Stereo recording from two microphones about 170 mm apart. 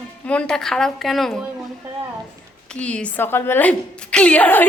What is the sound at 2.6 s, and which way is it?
A woman's voice, 5° left (ahead or behind).